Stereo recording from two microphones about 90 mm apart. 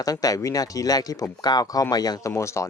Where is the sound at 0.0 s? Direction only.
40° left (ahead or behind).